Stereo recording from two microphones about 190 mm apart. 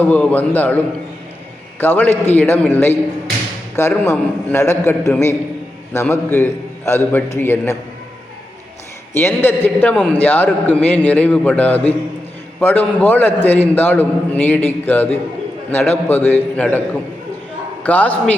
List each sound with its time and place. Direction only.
0.0 s a man's voice: 5° left (ahead or behind)
1.8 s a man's voice: 10° left (ahead or behind)
9.1 s a man's voice: 10° left (ahead or behind)
17.8 s a man's voice: 10° left (ahead or behind)